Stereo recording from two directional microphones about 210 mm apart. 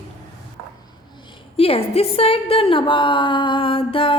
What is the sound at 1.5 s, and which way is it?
A woman's voice, 25° left (ahead or behind).